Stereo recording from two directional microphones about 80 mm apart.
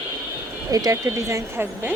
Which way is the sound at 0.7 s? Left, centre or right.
Right.